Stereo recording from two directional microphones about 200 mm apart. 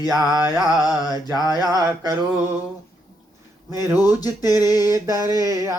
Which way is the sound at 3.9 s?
20° left (ahead or behind).